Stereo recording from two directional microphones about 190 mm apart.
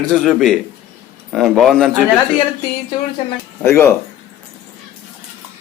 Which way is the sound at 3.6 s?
15° left (ahead or behind).